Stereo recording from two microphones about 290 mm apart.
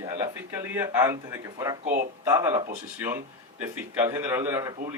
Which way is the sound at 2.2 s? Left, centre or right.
Centre.